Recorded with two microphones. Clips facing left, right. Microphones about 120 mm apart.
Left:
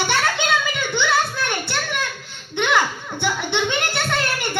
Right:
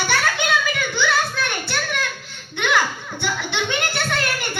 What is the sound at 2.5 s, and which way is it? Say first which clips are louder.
Music: left 1 dB; 20° left (ahead or behind).